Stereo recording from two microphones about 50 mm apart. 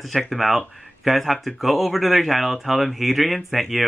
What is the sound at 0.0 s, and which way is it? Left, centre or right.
Speech, centre.